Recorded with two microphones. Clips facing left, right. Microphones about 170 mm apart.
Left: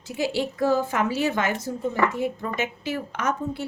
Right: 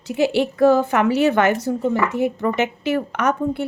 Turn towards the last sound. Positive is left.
turn(degrees=-65)  # may be behind; listen again after turning